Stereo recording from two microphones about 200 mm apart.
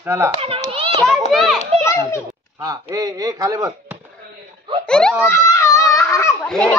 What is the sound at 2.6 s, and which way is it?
Speech, 15° right (ahead or behind).